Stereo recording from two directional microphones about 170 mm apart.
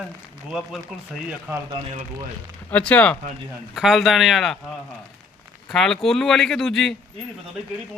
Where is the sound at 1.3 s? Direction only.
15° right (ahead or behind).